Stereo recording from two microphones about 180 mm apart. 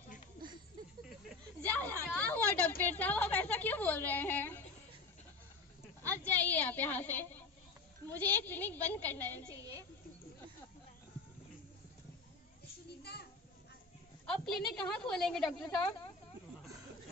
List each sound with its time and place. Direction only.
1.6 s a sound: 10° left (ahead or behind)
6.0 s a woman's voice: 10° left (ahead or behind)
9.5 s a woman's voice: 20° right (ahead or behind)
13.0 s children playing: 65° left (ahead or behind)
14.2 s a woman's voice: 5° left (ahead or behind)